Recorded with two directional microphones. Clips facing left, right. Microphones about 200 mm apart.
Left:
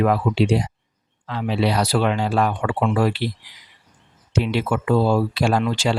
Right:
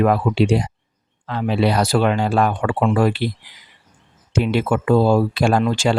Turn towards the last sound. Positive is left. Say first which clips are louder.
# right 3 dB
turn(degrees=-50)  # may be behind; listen again after turning